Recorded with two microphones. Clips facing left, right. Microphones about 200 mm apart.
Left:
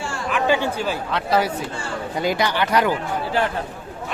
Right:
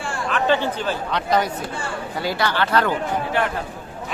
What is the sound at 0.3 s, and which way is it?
Speech, 10° left (ahead or behind).